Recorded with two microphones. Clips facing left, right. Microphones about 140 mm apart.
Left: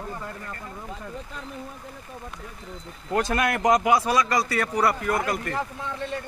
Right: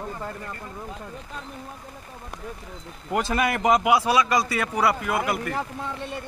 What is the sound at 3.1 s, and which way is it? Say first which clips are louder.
Speech: even; 5° right (ahead or behind).